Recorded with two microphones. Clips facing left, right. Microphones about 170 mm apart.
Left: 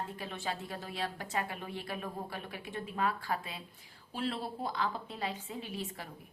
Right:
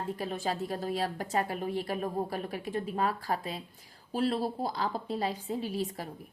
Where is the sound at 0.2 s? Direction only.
40° right (ahead or behind).